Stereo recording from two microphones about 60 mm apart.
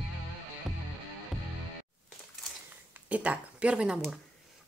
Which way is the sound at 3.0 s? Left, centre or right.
Right.